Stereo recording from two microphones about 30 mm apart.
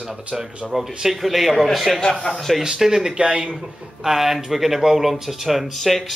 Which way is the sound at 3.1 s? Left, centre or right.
Right.